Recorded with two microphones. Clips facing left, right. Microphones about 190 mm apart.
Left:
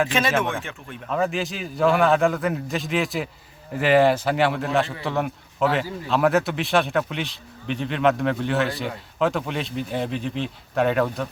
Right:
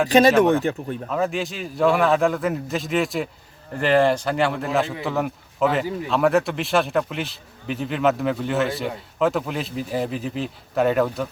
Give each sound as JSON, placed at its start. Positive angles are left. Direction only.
{"t": 0.1, "sound": "speech", "side_deg": -40}
{"t": 1.1, "sound": "a man's voice", "side_deg": 0}